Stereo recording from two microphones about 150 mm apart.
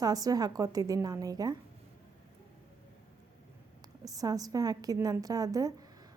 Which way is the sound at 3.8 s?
25° right (ahead or behind).